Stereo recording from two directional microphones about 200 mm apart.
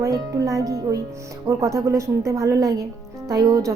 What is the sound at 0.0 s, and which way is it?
Speech, 15° right (ahead or behind).